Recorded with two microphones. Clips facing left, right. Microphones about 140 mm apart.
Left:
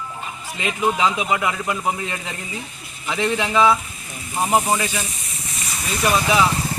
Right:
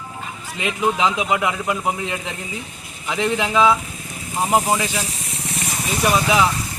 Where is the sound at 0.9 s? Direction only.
10° right (ahead or behind).